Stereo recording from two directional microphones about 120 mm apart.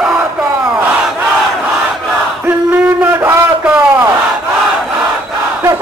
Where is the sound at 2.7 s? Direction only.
15° right (ahead or behind).